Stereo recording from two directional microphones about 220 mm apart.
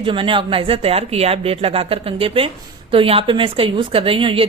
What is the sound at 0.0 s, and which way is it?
A woman's voice, 25° right (ahead or behind).